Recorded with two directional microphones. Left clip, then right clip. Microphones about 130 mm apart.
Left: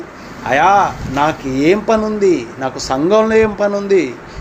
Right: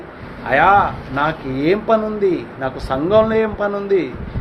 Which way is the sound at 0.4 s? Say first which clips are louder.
Left 2 dB; 50° left (ahead or behind).